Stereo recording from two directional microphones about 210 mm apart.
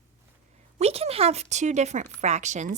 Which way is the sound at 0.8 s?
30° right (ahead or behind).